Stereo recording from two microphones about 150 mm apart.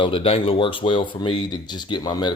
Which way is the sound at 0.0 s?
35° left (ahead or behind).